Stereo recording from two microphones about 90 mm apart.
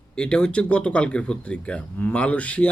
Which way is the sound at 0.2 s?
10° left (ahead or behind).